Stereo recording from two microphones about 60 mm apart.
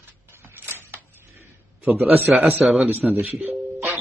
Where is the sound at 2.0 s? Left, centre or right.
Right.